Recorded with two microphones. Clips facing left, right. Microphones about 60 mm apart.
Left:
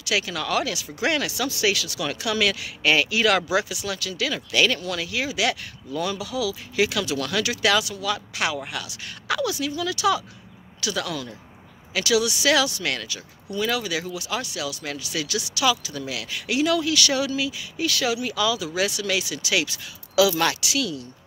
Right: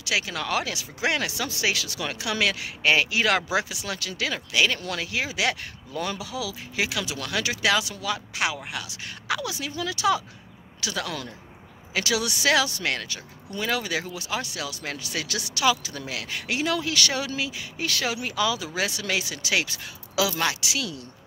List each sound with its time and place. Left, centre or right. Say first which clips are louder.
0.0 s speech: left 2 dB; right
4.5 s speech: left 2 dB; centre
4.7 s speech: left 1 dB; right
12.3 s speech: left 2 dB; right
12.5 s speech: left 1 dB; right
20.3 s speech: left 3 dB; centre
20.7 s speech: left 5 dB; right